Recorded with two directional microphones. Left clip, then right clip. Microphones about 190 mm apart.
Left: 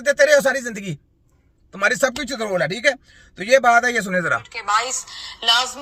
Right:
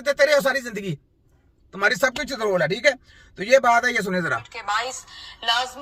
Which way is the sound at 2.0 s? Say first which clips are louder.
Left 2 dB; centre (ahead or behind).